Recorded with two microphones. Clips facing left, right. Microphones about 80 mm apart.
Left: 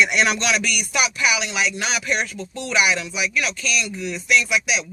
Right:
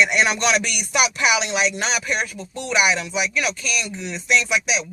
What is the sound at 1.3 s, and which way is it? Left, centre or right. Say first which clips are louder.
Speech: right 2 dB; right.